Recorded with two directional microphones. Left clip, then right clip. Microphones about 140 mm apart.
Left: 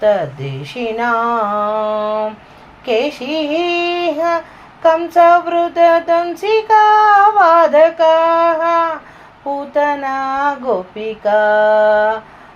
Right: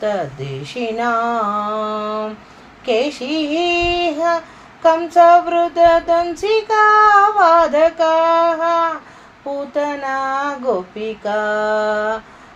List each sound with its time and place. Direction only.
0.6 s child singing: 40° left (ahead or behind)
2.8 s female singing: 45° left (ahead or behind)
4.8 s child singing: 40° left (ahead or behind)